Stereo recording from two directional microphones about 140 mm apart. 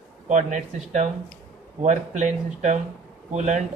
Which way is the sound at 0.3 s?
60° right (ahead or behind).